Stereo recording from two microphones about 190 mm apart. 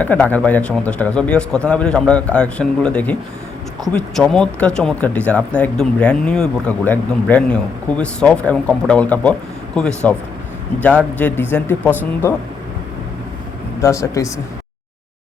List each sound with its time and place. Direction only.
0.0 s a man's voice: 10° left (ahead or behind)
11.2 s speech: 10° left (ahead or behind)
13.8 s speech: 15° left (ahead or behind)